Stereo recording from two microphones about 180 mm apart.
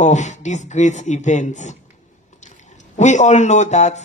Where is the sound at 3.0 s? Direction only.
40° left (ahead or behind).